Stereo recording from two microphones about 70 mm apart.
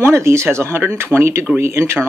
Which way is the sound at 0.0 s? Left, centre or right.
Right.